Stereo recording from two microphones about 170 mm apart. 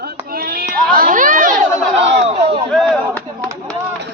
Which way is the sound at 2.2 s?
40° right (ahead or behind).